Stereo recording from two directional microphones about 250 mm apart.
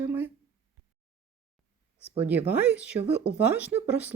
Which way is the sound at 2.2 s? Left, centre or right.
Centre.